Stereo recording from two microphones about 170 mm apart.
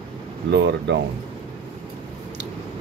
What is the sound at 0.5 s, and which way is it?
Speech, 80° right.